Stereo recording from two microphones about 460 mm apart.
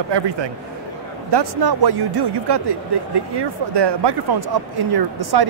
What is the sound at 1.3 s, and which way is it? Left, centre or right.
Speech, right.